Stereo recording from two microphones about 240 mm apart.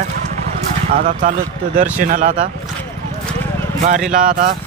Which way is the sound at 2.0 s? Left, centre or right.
Right.